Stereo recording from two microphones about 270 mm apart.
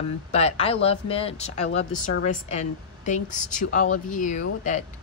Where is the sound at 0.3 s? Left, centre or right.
Left.